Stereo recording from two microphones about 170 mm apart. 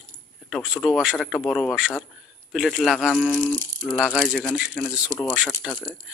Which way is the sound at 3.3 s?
10° left (ahead or behind).